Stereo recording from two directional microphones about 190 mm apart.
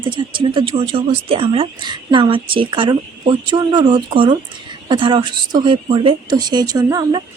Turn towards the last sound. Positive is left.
turn(degrees=-20)  # may be behind; listen again after turning